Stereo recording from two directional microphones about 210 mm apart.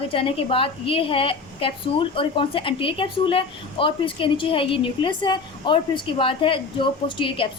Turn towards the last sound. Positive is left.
turn(degrees=25)  # may be behind; listen again after turning